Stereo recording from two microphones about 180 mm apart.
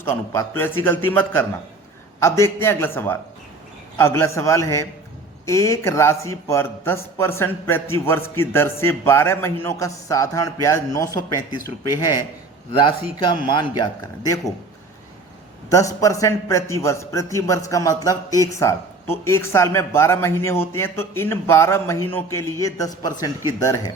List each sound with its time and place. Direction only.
0.0 s a man's voice: 10° left (ahead or behind)
15.7 s a man's voice: 20° left (ahead or behind)